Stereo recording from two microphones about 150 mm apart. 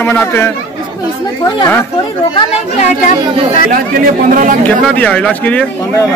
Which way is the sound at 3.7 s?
70° right (ahead or behind).